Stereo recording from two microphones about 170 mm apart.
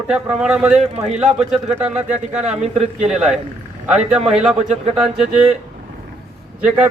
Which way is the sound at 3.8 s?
5° right (ahead or behind).